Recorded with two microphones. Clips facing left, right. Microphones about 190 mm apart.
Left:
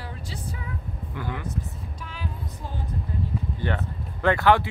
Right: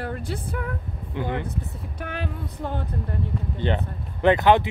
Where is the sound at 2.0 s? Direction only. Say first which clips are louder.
Right 6 dB; 65° right (ahead or behind).